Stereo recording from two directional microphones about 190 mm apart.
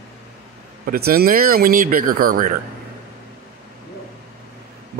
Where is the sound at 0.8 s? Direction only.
50° right (ahead or behind).